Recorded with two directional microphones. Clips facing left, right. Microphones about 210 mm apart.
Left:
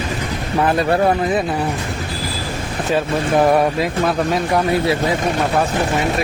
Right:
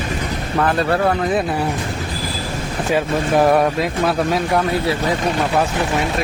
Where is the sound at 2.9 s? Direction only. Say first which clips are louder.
Even; centre (ahead or behind).